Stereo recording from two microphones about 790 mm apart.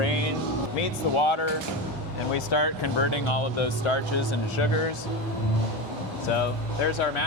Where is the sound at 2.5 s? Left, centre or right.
Left.